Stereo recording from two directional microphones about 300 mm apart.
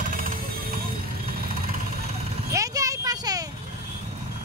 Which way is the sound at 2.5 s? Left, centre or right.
Centre.